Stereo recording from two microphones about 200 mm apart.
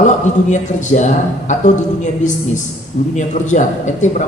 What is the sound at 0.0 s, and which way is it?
A man's voice, 35° left (ahead or behind).